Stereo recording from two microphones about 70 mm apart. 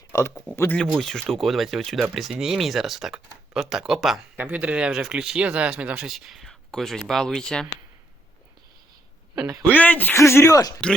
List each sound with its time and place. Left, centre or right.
0.1 s a sound: left
0.9 s speech: centre
4.4 s speech: right
6.1 s speech: centre
9.4 s speech: right
9.6 s speech: left
10.2 s speech: left
10.8 s speech: centre